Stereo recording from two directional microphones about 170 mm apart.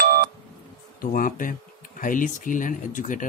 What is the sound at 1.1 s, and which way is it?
Speech, 55° left (ahead or behind).